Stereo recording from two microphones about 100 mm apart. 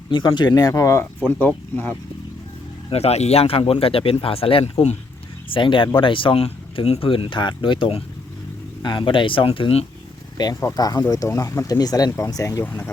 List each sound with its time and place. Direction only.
0.1 s speech: 50° left (ahead or behind); by 1.0 s 30° left (ahead or behind)
1.3 s speech: 15° left (ahead or behind)
2.9 s speech: 90° left
5.5 s speech: 55° left (ahead or behind); by 9.8 s 75° left (ahead or behind)
10.5 s speech: 30° left (ahead or behind)
12.6 s speech: 20° left (ahead or behind)